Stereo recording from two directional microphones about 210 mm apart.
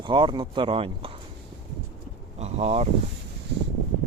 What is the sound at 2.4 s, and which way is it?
Vehicle, 30° right (ahead or behind).